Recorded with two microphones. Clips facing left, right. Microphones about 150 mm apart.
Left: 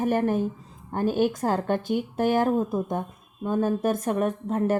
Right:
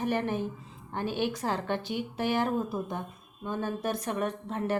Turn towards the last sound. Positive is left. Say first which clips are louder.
# left 7 dB
turn(degrees=45)  # may be behind; listen again after turning